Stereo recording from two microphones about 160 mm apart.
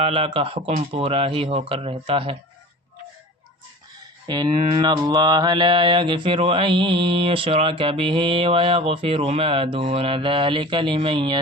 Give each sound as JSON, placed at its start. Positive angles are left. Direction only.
{"t": 0.0, "sound": "mantra", "side_deg": -35}
{"t": 4.3, "sound": "mantra", "side_deg": -25}